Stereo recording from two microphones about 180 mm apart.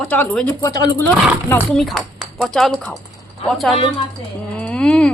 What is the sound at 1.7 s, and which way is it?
A woman's voice, centre (ahead or behind).